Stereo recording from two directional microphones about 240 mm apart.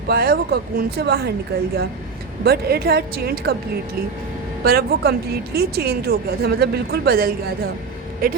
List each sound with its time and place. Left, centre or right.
0.1 s speech: right
2.4 s speech: right
4.6 s speech: right